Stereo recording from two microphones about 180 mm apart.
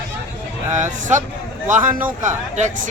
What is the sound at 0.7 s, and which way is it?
A man's voice, 45° right (ahead or behind).